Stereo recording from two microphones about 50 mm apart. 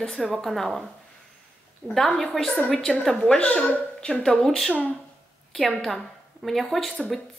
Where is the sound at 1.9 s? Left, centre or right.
Centre.